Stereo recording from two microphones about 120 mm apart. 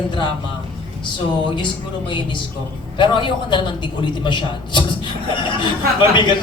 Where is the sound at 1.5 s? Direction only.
40° left (ahead or behind).